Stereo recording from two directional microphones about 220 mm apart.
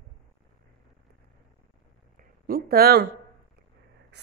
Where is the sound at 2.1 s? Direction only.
40° right (ahead or behind).